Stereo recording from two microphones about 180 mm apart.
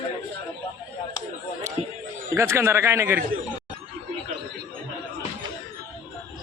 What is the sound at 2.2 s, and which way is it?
Speech, 15° right (ahead or behind).